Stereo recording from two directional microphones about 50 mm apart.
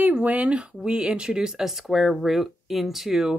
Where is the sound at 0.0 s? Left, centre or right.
Right.